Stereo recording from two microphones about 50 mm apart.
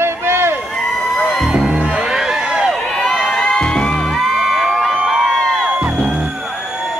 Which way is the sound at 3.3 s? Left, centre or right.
Centre.